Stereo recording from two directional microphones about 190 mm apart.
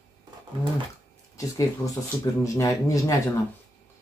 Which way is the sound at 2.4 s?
15° left (ahead or behind).